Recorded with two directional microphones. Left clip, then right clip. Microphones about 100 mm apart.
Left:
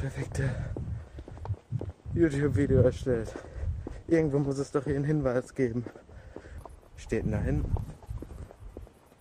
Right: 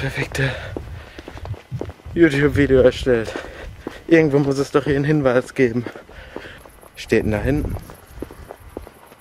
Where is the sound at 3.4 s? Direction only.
10° right (ahead or behind).